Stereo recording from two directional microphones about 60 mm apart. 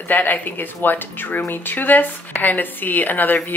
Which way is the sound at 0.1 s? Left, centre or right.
Left.